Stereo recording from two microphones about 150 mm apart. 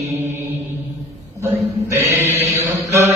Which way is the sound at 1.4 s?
20° right (ahead or behind).